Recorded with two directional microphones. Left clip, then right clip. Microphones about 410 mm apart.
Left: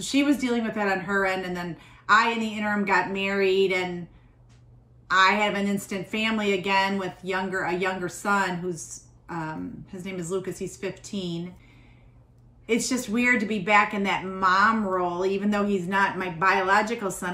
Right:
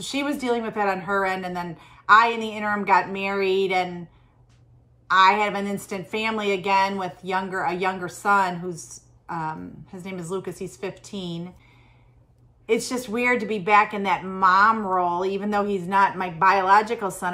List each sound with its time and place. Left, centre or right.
0.0 s a woman's voice: centre
5.0 s a woman's voice: centre
12.6 s a woman's voice: centre